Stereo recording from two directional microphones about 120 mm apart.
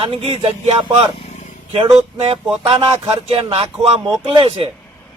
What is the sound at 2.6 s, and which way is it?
A man's voice, 50° right (ahead or behind).